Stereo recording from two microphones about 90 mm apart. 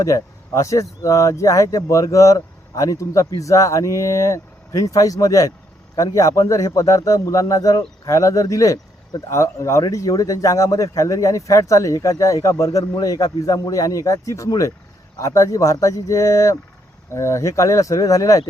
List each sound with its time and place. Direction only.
0.0 s speech: 35° left (ahead or behind)